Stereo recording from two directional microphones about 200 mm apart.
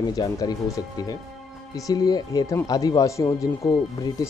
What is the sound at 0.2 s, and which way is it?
Speech, 20° left (ahead or behind).